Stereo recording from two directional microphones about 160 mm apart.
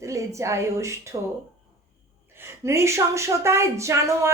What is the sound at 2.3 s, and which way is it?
A woman's voice, 15° right (ahead or behind).